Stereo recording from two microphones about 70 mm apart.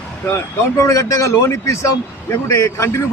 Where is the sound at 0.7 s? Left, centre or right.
Left.